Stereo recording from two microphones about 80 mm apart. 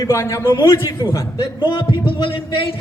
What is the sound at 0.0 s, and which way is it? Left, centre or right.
Speech, left.